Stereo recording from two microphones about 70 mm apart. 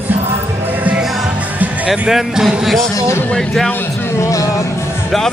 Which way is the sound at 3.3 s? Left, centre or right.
Centre.